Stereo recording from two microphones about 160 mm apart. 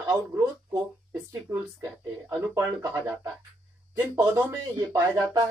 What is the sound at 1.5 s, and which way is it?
Speech, 15° right (ahead or behind).